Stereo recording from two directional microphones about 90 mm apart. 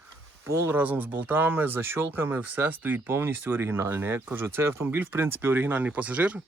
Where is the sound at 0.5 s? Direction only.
30° right (ahead or behind).